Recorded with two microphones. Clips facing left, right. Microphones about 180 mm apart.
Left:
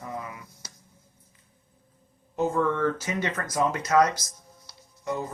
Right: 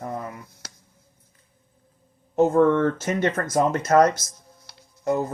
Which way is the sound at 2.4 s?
55° right (ahead or behind).